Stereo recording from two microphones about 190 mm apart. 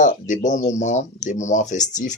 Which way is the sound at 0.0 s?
40° left (ahead or behind).